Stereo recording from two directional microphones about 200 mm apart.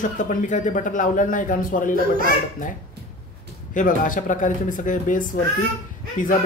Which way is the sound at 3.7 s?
40° left (ahead or behind).